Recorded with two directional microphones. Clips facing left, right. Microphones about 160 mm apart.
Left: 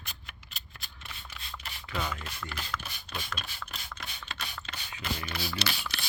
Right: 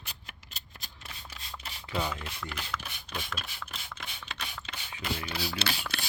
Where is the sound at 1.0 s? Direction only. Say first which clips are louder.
Even; 30° right (ahead or behind).